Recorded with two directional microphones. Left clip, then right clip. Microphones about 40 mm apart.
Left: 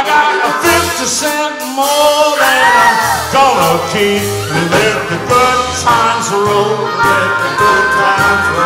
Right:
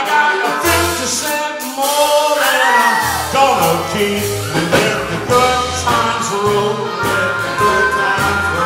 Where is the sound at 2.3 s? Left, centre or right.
Left.